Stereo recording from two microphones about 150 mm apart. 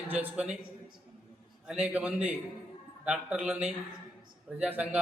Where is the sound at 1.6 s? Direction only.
10° right (ahead or behind).